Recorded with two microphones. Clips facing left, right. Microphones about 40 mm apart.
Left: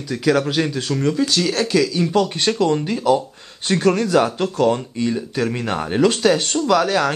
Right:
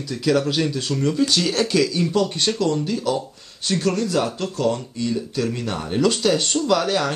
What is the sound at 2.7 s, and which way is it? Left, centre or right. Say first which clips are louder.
Speech: left 3 dB; left.